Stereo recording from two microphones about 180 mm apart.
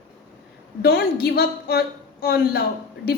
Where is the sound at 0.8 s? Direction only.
60° left (ahead or behind).